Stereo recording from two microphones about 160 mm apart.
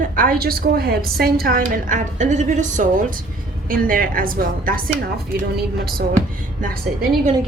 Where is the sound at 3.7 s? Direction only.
60° right (ahead or behind).